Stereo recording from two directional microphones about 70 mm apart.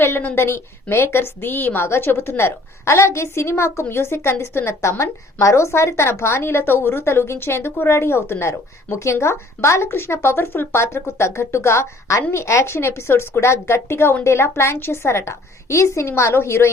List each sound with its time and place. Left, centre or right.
0.0 s a woman's voice: left